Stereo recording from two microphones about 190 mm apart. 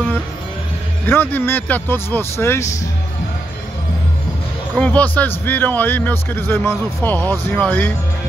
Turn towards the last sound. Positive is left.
turn(degrees=5)  # may be behind; listen again after turning